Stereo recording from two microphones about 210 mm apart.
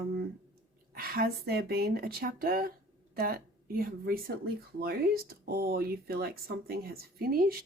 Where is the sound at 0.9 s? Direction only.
45° right (ahead or behind).